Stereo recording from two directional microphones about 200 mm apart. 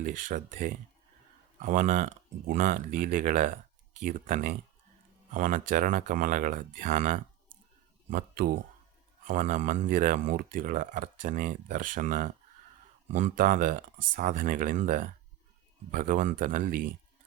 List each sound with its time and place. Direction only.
0.0 s speech: 40° right (ahead or behind)